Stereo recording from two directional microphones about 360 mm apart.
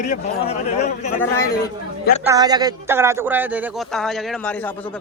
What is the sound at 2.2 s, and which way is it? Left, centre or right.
Speech, centre.